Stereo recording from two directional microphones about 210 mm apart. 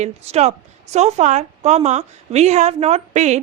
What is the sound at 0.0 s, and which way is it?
A woman's voice, 30° right (ahead or behind).